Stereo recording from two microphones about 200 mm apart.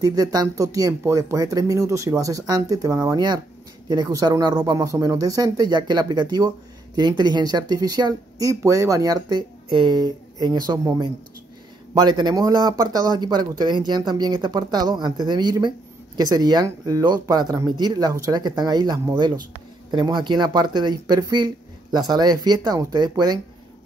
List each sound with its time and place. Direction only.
0.0 s speech: 20° right (ahead or behind)